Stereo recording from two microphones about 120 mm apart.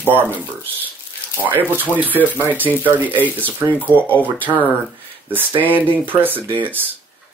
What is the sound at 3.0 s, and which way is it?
Speech, 15° left (ahead or behind).